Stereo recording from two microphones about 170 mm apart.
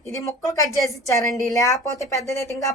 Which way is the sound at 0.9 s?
20° left (ahead or behind).